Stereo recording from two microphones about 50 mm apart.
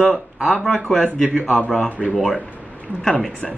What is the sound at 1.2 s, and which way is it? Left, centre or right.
A man's voice, centre.